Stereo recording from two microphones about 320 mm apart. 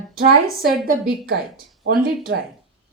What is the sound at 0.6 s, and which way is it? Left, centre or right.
Speech, centre.